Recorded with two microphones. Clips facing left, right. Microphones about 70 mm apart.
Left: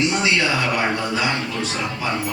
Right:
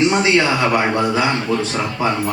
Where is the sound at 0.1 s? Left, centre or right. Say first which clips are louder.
Right 5 dB; right.